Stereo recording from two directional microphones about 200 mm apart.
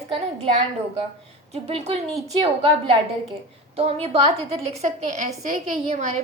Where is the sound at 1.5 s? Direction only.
30° right (ahead or behind).